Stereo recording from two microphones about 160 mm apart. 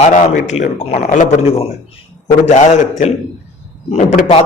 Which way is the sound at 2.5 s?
45° left (ahead or behind).